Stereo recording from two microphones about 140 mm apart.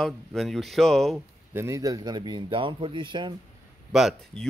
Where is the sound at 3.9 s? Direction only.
Centre (ahead or behind).